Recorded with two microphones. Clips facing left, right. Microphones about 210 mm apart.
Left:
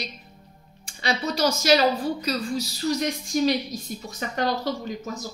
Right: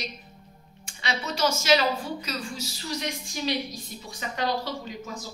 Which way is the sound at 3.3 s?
45° left (ahead or behind).